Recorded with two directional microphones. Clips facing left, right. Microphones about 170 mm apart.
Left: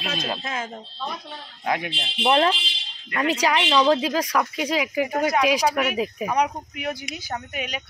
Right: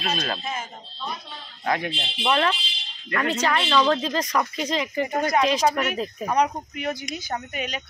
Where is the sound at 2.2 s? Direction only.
30° left (ahead or behind).